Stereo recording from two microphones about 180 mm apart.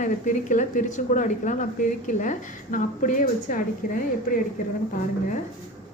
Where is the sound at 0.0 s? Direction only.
45° left (ahead or behind).